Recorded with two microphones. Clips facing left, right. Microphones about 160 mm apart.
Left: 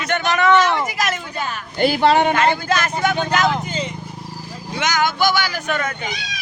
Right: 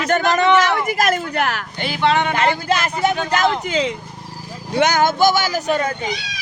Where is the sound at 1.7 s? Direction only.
40° left (ahead or behind).